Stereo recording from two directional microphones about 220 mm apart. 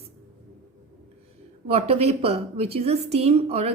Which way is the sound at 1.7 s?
25° right (ahead or behind).